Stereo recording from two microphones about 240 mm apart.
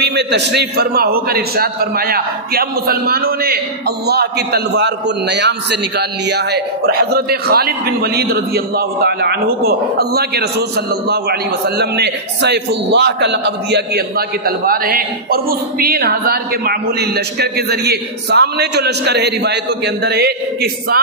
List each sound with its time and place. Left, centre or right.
0.0 s a man's voice: right